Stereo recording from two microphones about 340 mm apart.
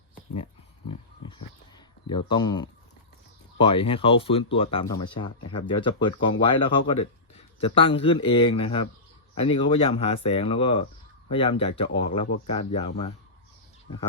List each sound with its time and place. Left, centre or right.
2.0 s speech: centre